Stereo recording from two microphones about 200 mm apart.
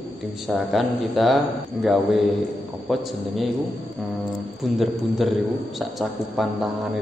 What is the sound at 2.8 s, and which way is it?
Speech, centre (ahead or behind).